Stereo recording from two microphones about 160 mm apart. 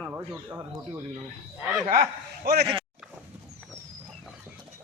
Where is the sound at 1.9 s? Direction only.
70° right (ahead or behind).